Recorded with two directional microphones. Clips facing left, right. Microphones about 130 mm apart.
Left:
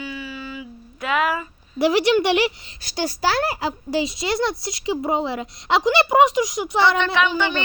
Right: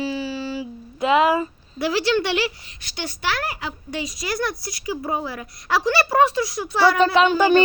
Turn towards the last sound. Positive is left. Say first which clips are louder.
# right 8 dB
turn(degrees=-35)  # may be behind; listen again after turning